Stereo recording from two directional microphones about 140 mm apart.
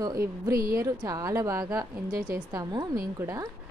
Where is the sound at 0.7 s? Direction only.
25° right (ahead or behind).